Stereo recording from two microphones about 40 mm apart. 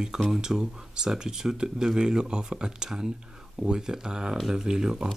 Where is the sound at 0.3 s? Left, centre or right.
Centre.